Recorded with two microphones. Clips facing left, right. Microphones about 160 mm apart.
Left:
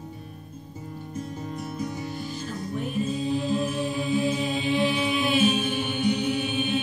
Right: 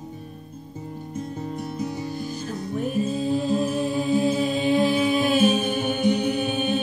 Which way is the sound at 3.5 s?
35° right (ahead or behind).